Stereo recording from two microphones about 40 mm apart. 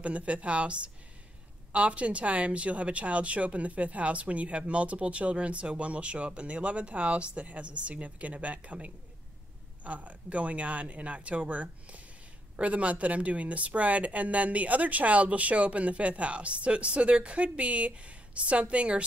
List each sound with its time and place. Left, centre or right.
0.0 s speech: right